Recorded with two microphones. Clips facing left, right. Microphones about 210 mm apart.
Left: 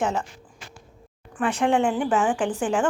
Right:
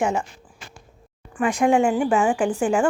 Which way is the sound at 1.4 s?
10° right (ahead or behind).